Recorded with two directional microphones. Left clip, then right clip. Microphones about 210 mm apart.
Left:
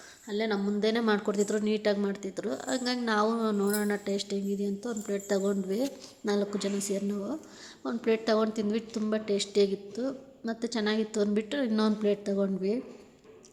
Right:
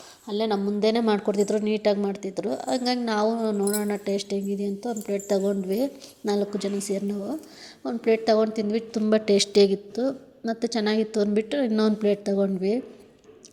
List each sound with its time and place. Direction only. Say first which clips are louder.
0.3 s a woman's voice: right 5 dB; 20° right (ahead or behind)
9.0 s a woman's voice: right 10 dB; 30° right (ahead or behind)